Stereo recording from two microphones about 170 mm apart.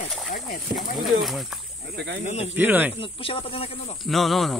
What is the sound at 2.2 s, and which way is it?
Speech, 40° left (ahead or behind).